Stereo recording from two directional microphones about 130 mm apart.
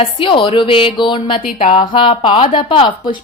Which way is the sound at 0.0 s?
40° left (ahead or behind).